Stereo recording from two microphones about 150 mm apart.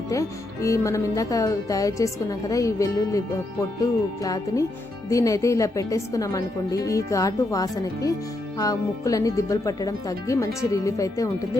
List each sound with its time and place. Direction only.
0.1 s speech: 20° left (ahead or behind)